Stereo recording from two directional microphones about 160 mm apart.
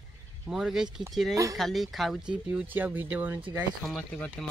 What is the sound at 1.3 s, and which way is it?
Speech, 20° right (ahead or behind).